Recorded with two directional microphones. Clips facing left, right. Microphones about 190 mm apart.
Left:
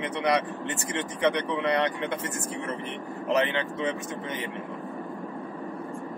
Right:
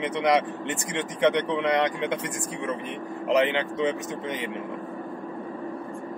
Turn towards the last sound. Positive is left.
turn(degrees=-20)  # may be behind; listen again after turning